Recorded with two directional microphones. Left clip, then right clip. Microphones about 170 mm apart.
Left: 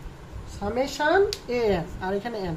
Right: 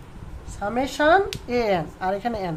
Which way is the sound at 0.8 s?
45° right (ahead or behind).